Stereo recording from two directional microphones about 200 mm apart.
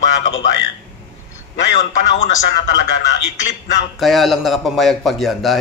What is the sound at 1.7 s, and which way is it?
Speech, 40° left (ahead or behind).